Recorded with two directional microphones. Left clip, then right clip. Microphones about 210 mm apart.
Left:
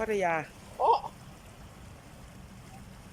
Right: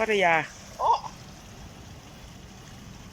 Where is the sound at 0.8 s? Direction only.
15° left (ahead or behind).